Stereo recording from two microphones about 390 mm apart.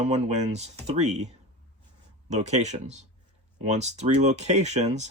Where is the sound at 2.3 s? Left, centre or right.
Centre.